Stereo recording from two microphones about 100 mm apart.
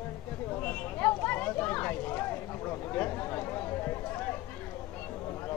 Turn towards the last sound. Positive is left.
turn(degrees=30)  # may be behind; listen again after turning